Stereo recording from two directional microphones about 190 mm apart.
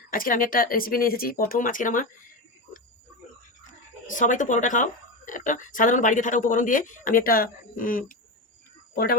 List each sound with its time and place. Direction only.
0.1 s speech: 45° left (ahead or behind)
4.0 s speech: 40° left (ahead or behind)